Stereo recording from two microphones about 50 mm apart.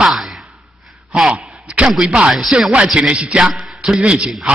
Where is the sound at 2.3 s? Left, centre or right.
Centre.